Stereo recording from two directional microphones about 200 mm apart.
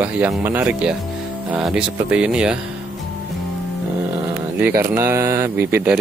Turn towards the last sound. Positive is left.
turn(degrees=-10)  # may be behind; listen again after turning